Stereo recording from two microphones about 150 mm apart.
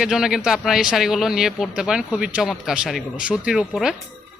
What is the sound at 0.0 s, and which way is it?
A man's voice, 5° right (ahead or behind).